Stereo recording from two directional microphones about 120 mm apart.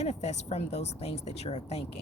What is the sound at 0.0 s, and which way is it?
Speech, 65° left (ahead or behind).